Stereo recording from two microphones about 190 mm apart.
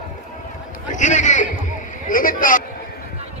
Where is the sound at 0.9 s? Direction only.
40° left (ahead or behind).